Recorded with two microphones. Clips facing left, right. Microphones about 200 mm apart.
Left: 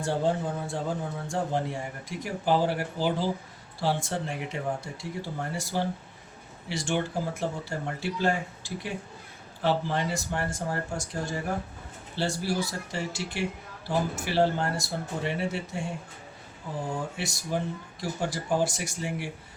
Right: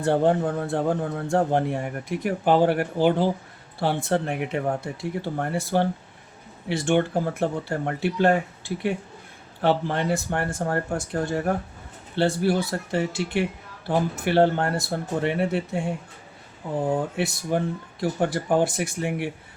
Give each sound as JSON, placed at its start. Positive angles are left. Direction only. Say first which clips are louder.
{"t": 0.0, "sound": "a man's voice", "louder": "right 7 dB", "side_deg": -60}
{"t": 16.8, "sound": "a man's voice", "louder": "right 9 dB", "side_deg": -60}